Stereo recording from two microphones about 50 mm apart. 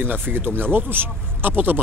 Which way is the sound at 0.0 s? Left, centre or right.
Right.